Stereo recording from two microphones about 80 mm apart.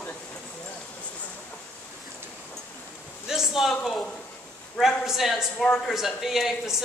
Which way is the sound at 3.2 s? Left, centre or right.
Centre.